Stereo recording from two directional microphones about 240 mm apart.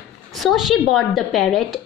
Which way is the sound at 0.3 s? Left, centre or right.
Centre.